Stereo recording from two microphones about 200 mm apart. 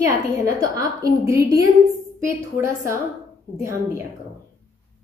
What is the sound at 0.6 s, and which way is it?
A woman's voice, 15° right (ahead or behind).